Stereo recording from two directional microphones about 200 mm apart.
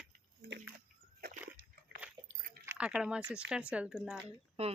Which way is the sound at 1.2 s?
50° right (ahead or behind).